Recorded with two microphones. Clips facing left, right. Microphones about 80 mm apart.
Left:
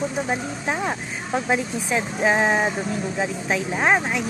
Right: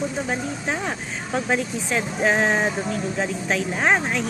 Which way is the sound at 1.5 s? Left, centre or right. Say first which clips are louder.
Left 1 dB; centre.